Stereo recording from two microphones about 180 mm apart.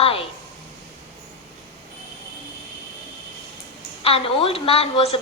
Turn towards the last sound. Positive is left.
turn(degrees=35)  # may be behind; listen again after turning